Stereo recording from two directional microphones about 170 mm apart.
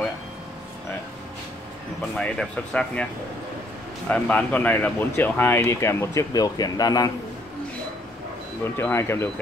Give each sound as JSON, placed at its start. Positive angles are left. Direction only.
{"t": 2.1, "sound": "speech", "side_deg": 5}
{"t": 4.1, "sound": "speech", "side_deg": 10}
{"t": 8.7, "sound": "speech", "side_deg": 15}